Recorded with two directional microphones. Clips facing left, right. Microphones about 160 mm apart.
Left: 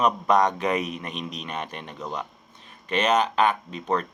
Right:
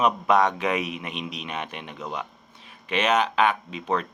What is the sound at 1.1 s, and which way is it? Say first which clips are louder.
Speech: even; 40° left (ahead or behind).